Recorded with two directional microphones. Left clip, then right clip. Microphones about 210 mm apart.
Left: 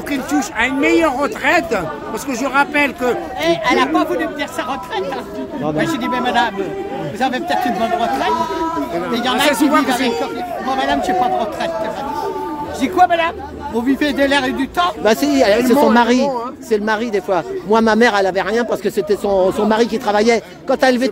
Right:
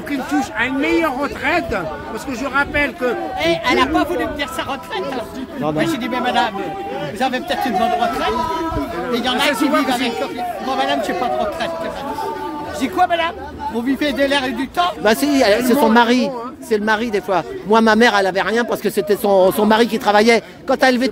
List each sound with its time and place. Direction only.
0.1 s speech: 40° left (ahead or behind)
3.3 s speech: 5° right (ahead or behind)
5.6 s speech: 5° right (ahead or behind)
12.8 s speech: 5° left (ahead or behind)
15.0 s a man's voice: 5° right (ahead or behind)